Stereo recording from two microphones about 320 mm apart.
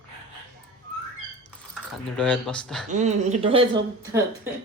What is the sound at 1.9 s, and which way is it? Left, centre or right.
Speech, centre.